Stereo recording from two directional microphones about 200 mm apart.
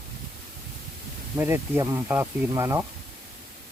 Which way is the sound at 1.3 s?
10° right (ahead or behind).